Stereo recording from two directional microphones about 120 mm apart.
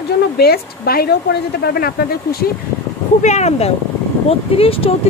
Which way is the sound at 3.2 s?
70° left (ahead or behind).